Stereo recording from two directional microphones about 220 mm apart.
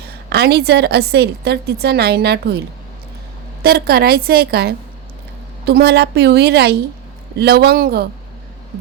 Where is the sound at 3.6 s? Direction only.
45° right (ahead or behind).